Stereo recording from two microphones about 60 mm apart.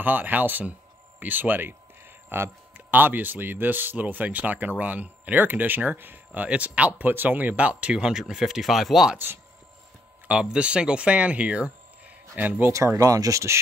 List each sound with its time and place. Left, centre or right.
0.0 s speech: right; by 9.2 s centre
10.2 s speech: centre; by 12.7 s right
12.7 s speech: right